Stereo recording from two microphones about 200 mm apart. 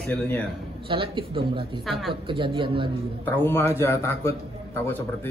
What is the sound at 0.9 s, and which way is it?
A man's voice, 25° right (ahead or behind).